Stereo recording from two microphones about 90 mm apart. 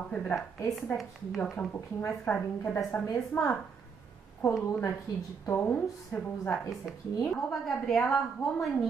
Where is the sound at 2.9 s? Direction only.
30° left (ahead or behind).